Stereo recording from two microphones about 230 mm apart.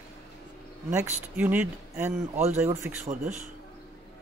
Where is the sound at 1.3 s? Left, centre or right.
Centre.